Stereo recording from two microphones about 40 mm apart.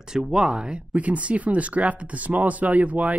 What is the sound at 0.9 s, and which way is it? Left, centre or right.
Speech, right.